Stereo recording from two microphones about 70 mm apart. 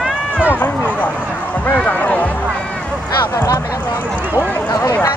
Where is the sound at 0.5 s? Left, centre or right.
Left.